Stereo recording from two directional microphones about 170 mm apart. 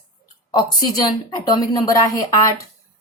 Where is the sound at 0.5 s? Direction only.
25° left (ahead or behind).